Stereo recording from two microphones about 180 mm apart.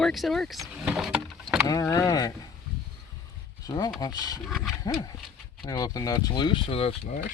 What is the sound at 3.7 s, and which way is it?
Speech, 20° left (ahead or behind).